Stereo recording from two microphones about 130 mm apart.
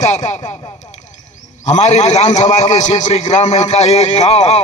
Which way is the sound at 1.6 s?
60° left (ahead or behind).